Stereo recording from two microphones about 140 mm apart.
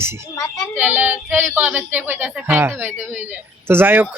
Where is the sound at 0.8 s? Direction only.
15° right (ahead or behind).